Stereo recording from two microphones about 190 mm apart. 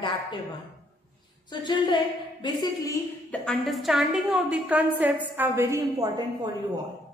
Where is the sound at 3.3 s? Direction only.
Centre (ahead or behind); by 6.2 s 15° right (ahead or behind).